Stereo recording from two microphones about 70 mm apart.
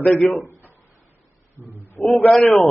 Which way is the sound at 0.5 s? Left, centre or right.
Right.